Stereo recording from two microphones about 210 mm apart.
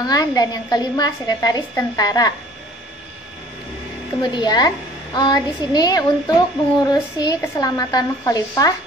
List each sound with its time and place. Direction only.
0.0 s a woman's voice: 20° left (ahead or behind)
4.2 s a woman's voice: 20° left (ahead or behind)